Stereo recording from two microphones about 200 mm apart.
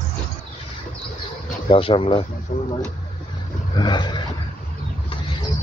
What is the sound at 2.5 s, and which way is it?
Vehicle, 45° left (ahead or behind).